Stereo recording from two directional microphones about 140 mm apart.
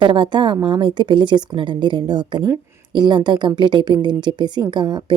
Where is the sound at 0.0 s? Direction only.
35° right (ahead or behind).